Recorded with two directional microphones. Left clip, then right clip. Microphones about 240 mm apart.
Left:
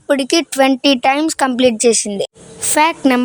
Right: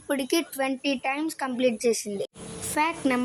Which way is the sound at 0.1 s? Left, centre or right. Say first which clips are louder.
Left 12 dB; left.